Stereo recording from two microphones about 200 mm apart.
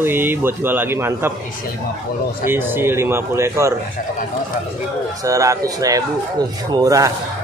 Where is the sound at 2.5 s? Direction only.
10° right (ahead or behind).